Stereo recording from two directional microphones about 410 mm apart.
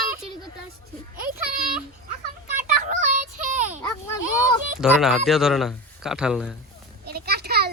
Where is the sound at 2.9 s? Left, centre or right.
Centre.